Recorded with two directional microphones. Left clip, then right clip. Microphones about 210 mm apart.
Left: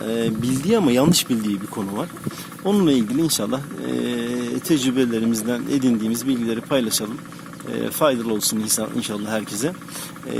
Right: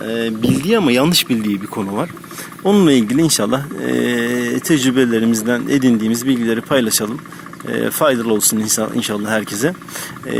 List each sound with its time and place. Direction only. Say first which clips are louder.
0.0 s speech: right 4 dB; 5° left (ahead or behind); by 9.7 s 15° right (ahead or behind)